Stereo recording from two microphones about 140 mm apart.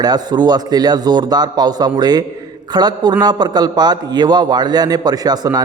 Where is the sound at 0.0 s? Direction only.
30° right (ahead or behind).